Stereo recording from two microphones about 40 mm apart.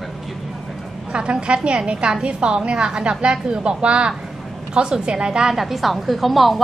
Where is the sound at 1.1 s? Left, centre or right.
Right.